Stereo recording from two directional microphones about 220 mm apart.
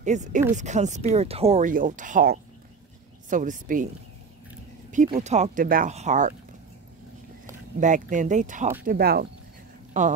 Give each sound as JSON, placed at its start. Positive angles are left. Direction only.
{"t": 0.0, "sound": "speech", "side_deg": -35}
{"t": 4.9, "sound": "speech", "side_deg": -35}
{"t": 7.8, "sound": "speech", "side_deg": -35}